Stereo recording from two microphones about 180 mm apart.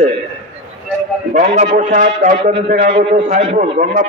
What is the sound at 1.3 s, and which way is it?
A man's voice, 45° right (ahead or behind).